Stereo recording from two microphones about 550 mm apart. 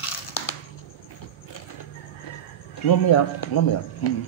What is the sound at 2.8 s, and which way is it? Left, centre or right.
Speech, left.